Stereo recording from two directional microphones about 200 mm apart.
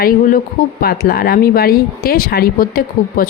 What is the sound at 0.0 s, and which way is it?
Speech, 45° left (ahead or behind).